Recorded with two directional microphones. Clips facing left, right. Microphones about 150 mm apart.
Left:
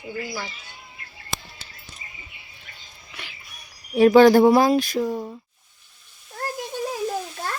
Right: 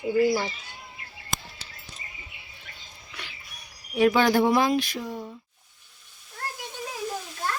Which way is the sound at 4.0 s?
35° left (ahead or behind).